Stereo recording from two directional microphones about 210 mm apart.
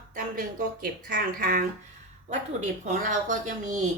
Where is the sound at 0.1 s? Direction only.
40° right (ahead or behind).